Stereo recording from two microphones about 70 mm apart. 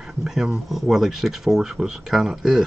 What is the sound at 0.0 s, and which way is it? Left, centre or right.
Speech, centre.